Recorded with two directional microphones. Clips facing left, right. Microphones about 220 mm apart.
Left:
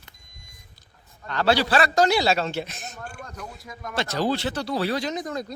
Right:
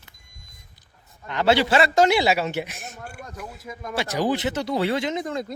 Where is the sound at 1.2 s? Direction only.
20° right (ahead or behind).